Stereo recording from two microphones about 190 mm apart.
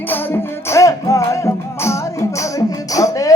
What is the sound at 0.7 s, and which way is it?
Music, 15° left (ahead or behind).